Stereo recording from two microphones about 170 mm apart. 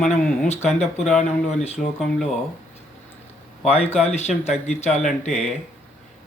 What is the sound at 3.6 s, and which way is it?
Speech, 40° left (ahead or behind).